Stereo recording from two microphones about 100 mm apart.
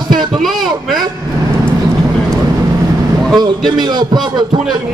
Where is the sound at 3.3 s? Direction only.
45° right (ahead or behind).